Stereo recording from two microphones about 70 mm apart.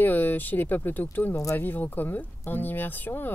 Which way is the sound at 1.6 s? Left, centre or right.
Left.